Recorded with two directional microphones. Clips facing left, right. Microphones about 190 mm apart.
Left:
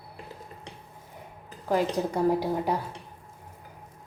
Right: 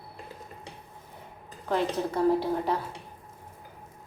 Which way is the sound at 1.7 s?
10° left (ahead or behind).